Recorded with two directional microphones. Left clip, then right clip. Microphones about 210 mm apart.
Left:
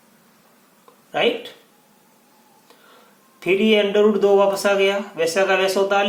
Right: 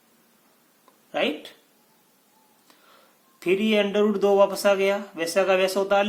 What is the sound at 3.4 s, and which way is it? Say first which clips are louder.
Speech: left 5 dB; 40° right (ahead or behind).